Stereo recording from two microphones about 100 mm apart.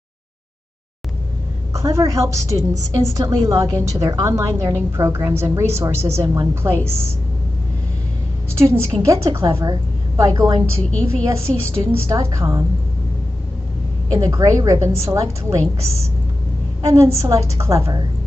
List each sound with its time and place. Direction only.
1.7 s a woman's voice: 30° right (ahead or behind)
6.5 s a woman's voice: 25° right (ahead or behind)
8.5 s a woman's voice: 30° right (ahead or behind)
14.1 s a woman's voice: 35° right (ahead or behind)
16.8 s a woman's voice: 30° right (ahead or behind)